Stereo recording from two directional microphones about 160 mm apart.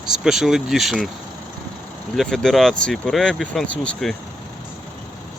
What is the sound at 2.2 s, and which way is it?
Speech, centre (ahead or behind).